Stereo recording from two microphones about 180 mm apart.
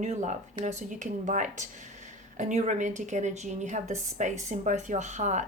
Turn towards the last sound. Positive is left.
turn(degrees=-40)  # may be behind; listen again after turning